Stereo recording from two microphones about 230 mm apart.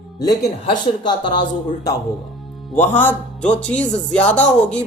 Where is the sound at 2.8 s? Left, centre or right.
Centre.